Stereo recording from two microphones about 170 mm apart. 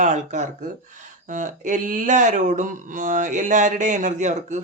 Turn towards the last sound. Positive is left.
turn(degrees=-45)  # may be behind; listen again after turning